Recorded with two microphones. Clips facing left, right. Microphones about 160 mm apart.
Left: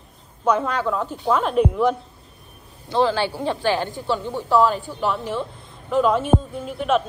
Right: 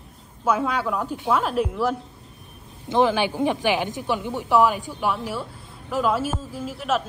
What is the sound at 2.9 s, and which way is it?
A woman's voice, 15° right (ahead or behind).